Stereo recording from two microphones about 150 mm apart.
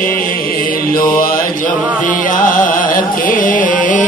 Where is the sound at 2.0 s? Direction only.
65° left (ahead or behind).